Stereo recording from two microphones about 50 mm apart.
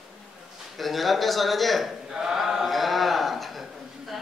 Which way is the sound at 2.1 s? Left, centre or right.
Centre.